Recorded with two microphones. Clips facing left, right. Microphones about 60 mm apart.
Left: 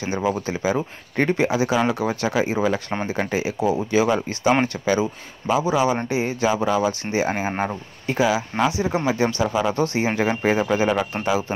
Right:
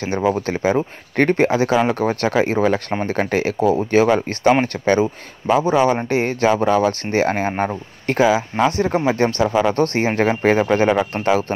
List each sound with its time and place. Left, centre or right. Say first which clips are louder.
0.0 s speech: right 4 dB; right